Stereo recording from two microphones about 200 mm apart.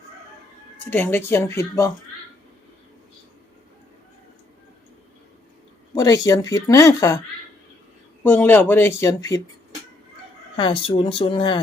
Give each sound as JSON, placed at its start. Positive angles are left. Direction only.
{"t": 0.9, "sound": "speech", "side_deg": 10}
{"t": 5.9, "sound": "speech", "side_deg": 20}
{"t": 8.2, "sound": "speech", "side_deg": 10}
{"t": 10.6, "sound": "speech", "side_deg": 25}